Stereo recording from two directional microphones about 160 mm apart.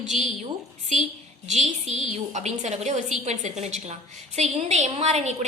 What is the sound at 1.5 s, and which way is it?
A woman's voice, 45° right (ahead or behind).